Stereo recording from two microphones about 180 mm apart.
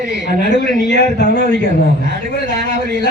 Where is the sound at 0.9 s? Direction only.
70° left (ahead or behind).